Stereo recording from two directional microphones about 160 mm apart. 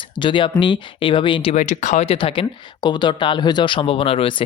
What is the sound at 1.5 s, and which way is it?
Speech, 50° left (ahead or behind).